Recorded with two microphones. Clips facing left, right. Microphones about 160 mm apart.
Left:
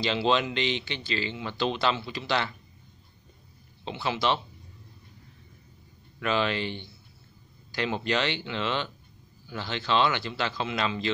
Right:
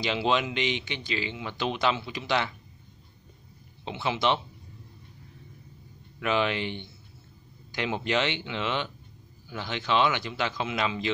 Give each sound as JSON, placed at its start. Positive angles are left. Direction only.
{"t": 0.0, "sound": "speech", "side_deg": -15}
{"t": 3.8, "sound": "speech", "side_deg": -20}
{"t": 6.1, "sound": "speech", "side_deg": -15}